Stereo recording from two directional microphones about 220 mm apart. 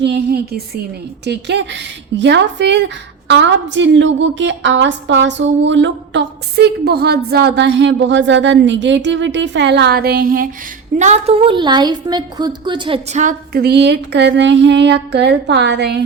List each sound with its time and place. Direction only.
0.0 s a woman's voice: 50° right (ahead or behind)